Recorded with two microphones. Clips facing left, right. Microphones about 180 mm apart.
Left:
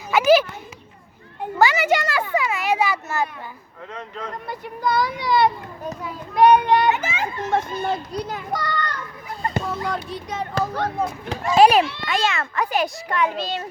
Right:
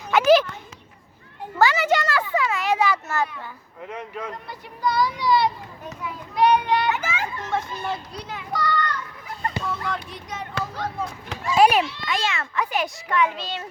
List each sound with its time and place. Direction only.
0.1 s children playing: centre (ahead or behind)
1.5 s children playing: 10° left (ahead or behind)
2.3 s a sound: 10° left (ahead or behind)
3.9 s a man's voice: 10° right (ahead or behind)
4.4 s a child's voice: 55° left (ahead or behind)
5.8 s a child's voice: 35° left (ahead or behind)
6.3 s a child's voice: 50° left (ahead or behind)
6.9 s a child's voice: 20° left (ahead or behind)
7.5 s a child's voice: 45° left (ahead or behind)
10.8 s a child's voice: 55° left (ahead or behind)
12.0 s a child's voice: 40° left (ahead or behind)